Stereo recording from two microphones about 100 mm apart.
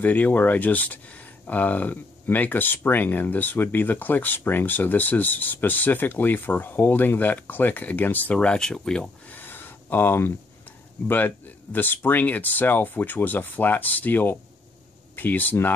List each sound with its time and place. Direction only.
0.0 s speech: 15° left (ahead or behind)
9.3 s a sound: 20° left (ahead or behind)
11.1 s speech: 20° left (ahead or behind)